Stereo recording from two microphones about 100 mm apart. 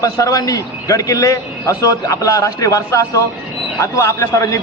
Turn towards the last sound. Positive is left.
turn(degrees=30)  # may be behind; listen again after turning